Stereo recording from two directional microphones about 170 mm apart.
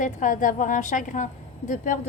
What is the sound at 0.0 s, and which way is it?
A woman's voice, 50° left (ahead or behind).